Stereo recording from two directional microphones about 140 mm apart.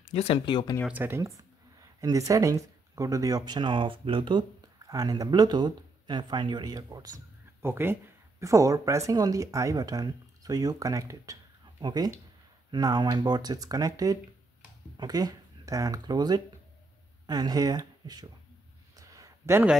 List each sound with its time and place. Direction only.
0.1 s speech: 45° left (ahead or behind)
0.8 s speech: 15° right (ahead or behind)
7.6 s speech: 15° right (ahead or behind)
18.9 s a sound: 25° right (ahead or behind)